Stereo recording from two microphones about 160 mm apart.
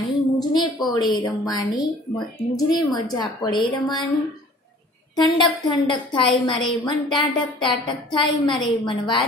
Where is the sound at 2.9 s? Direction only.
25° left (ahead or behind).